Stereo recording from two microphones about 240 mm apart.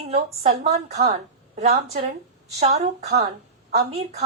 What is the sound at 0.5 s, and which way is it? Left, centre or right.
A woman's voice, right.